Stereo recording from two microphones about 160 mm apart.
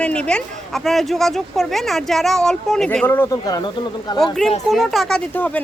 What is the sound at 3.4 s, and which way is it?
Speech, 25° left (ahead or behind).